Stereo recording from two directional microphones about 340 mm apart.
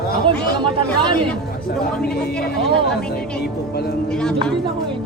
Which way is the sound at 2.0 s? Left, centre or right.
Left.